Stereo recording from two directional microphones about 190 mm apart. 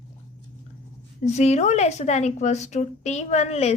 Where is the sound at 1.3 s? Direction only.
35° left (ahead or behind).